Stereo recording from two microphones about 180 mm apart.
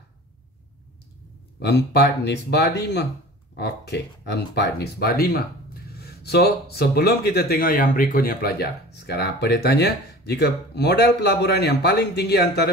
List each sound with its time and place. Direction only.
1.6 s speech: 70° left (ahead or behind)